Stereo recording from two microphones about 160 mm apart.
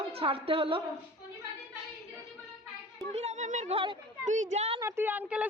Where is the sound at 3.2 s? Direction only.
45° right (ahead or behind).